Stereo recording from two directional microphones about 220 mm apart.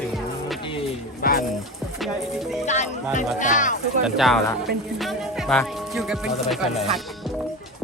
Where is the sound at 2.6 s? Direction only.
30° left (ahead or behind).